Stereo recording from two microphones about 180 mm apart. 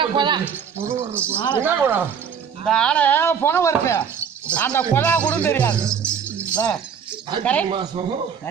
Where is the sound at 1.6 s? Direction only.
10° right (ahead or behind).